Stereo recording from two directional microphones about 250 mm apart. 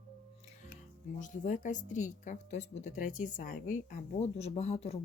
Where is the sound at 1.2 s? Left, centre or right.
Left.